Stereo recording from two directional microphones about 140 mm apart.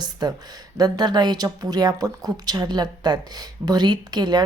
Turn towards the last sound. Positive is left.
turn(degrees=-30)  # may be behind; listen again after turning